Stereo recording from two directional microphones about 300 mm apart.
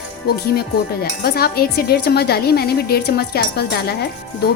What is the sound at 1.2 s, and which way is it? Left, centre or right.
Speech, left.